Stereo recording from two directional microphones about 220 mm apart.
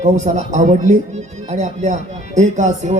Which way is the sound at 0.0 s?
35° right (ahead or behind).